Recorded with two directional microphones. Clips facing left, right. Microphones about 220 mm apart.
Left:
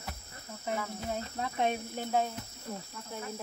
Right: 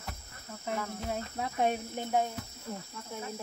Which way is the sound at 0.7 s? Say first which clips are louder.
Right 2 dB; 5° right (ahead or behind).